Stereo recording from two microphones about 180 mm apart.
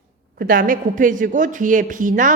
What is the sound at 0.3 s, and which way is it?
A woman's voice, 50° right (ahead or behind).